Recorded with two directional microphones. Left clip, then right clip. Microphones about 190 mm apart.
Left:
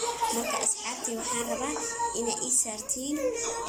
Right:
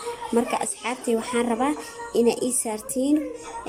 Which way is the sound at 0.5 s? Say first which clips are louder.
Right 5 dB; 50° right (ahead or behind).